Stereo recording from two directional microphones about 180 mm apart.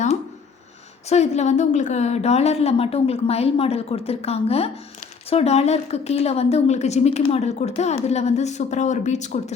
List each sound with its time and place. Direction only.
1.1 s a woman's voice: 40° left (ahead or behind)